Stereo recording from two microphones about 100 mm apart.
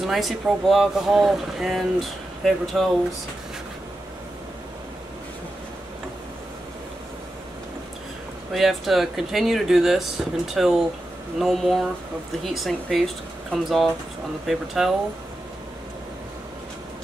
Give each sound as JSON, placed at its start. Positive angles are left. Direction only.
{"t": 0.0, "sound": "speech", "side_deg": 0}
{"t": 8.5, "sound": "speech", "side_deg": 0}